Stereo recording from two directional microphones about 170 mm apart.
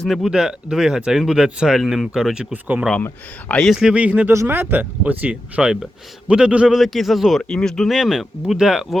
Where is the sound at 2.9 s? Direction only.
10° left (ahead or behind).